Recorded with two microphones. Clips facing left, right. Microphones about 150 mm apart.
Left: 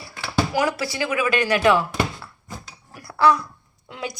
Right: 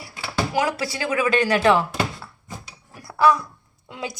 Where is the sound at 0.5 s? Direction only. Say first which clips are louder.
Even; 25° right (ahead or behind).